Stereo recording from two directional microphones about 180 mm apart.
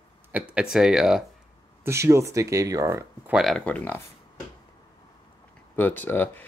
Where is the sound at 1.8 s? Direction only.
15° right (ahead or behind).